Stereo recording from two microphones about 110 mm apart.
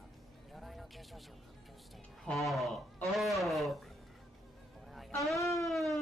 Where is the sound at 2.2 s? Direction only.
Centre (ahead or behind).